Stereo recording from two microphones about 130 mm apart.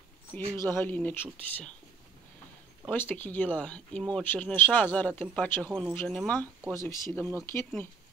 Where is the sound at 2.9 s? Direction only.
15° left (ahead or behind).